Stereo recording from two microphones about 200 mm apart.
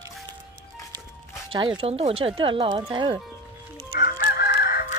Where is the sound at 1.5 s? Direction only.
25° right (ahead or behind).